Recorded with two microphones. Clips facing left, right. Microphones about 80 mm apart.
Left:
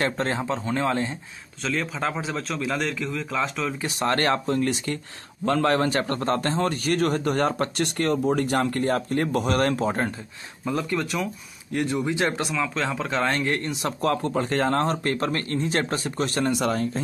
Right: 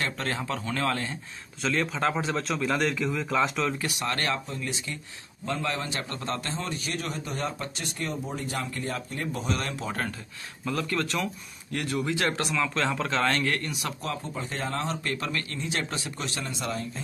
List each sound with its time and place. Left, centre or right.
0.0 s a man's voice: left
1.6 s speech: centre
3.8 s speech: left
4.5 s a man's voice: left
9.8 s a man's voice: left
12.5 s speech: centre; by 13.9 s left
14.0 s a man's voice: left